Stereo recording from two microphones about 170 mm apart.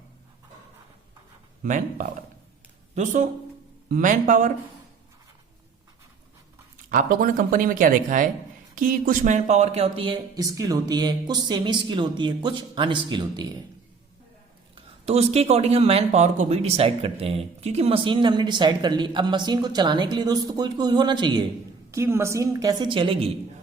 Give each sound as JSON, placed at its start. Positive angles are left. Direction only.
{"t": 1.6, "sound": "speech", "side_deg": -50}
{"t": 6.9, "sound": "speech", "side_deg": -55}
{"t": 10.4, "sound": "speech", "side_deg": -20}
{"t": 15.0, "sound": "speech", "side_deg": -40}
{"t": 21.9, "sound": "speech", "side_deg": -15}